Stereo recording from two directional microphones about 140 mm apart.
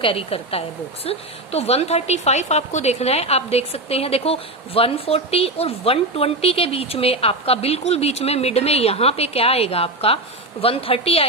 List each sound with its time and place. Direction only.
0.0 s a woman's voice: 40° left (ahead or behind)